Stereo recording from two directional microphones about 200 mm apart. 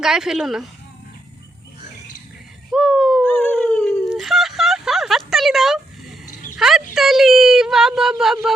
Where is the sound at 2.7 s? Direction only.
Centre (ahead or behind).